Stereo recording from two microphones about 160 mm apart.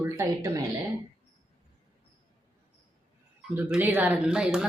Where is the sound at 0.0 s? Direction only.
15° right (ahead or behind).